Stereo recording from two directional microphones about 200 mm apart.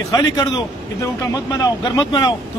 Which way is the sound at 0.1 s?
20° left (ahead or behind).